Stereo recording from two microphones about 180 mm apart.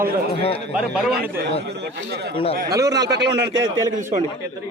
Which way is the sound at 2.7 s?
20° right (ahead or behind).